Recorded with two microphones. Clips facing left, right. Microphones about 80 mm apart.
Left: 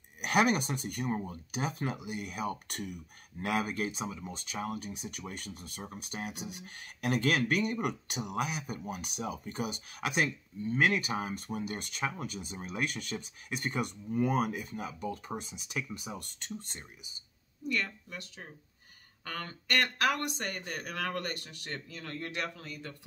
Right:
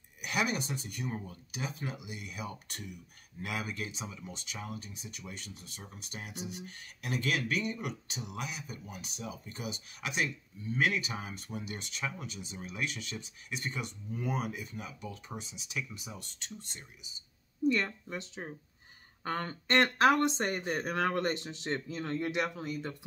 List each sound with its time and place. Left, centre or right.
0.2 s speech: left
17.6 s speech: right